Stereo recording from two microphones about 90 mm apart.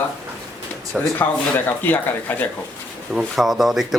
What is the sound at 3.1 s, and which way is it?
Speech, centre (ahead or behind).